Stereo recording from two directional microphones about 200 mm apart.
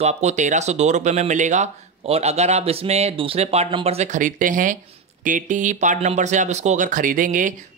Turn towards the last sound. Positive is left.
turn(degrees=-40)  # may be behind; listen again after turning